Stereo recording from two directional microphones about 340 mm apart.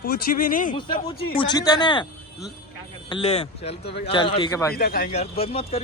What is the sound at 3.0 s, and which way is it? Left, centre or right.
Speech, centre.